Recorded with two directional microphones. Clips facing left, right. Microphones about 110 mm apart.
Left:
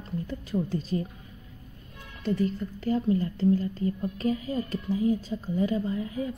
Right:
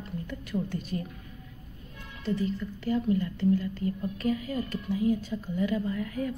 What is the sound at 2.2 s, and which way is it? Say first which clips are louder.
A woman's voice: left 2 dB; 40° left (ahead or behind).